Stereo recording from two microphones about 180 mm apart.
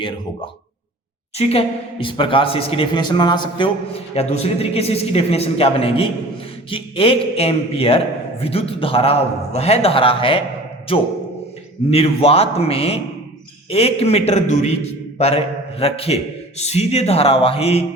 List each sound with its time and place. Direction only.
1.4 s speech: 35° left (ahead or behind)
11.9 s speech: 35° left (ahead or behind)